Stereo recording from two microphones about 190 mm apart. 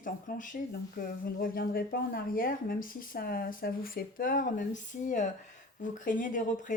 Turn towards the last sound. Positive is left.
turn(degrees=40)  # may be behind; listen again after turning